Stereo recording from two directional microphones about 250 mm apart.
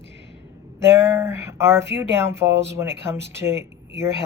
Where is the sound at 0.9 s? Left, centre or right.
Centre.